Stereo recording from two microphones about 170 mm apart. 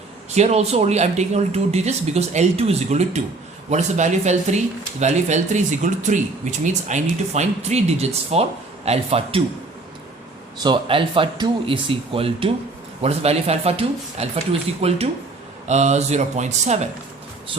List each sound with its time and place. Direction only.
0.3 s speech: 40° right (ahead or behind)
10.6 s a man's voice: 30° right (ahead or behind)